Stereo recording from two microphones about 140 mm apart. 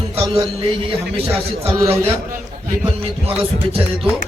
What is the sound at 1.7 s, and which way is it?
Speech, 20° right (ahead or behind).